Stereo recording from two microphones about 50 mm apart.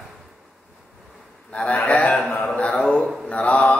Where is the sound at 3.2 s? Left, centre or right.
Left.